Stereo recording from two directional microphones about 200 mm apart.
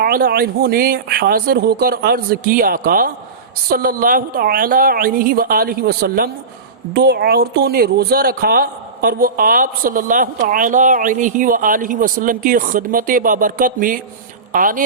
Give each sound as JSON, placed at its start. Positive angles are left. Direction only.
{"t": 0.0, "sound": "speech", "side_deg": -50}